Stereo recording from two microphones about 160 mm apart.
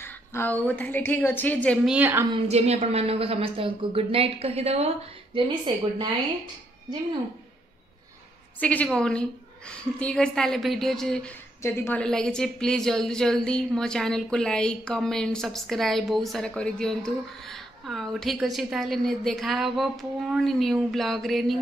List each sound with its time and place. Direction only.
0.0 s a woman's voice: 15° left (ahead or behind)
1.9 s a woman's voice: 10° right (ahead or behind)
2.3 s a woman's voice: 40° right (ahead or behind)
8.5 s a woman's voice: 10° left (ahead or behind)
11.6 s a woman's voice: 15° left (ahead or behind)